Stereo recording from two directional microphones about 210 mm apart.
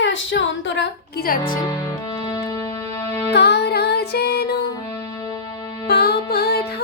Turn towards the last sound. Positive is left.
turn(degrees=50)  # may be behind; listen again after turning